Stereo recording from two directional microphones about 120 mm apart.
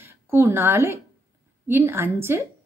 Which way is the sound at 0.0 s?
20° right (ahead or behind).